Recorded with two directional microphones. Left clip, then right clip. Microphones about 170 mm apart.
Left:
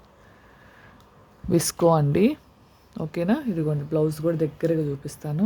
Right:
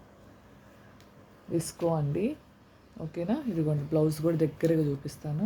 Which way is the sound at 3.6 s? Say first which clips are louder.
Left 4 dB; 20° left (ahead or behind).